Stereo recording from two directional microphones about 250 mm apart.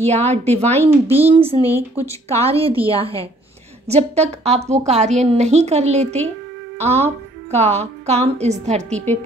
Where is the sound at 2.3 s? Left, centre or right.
Right.